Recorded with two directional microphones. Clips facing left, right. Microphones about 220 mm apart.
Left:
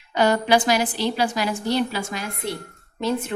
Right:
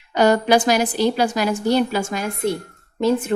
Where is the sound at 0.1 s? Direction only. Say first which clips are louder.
Right 3 dB; 45° right (ahead or behind).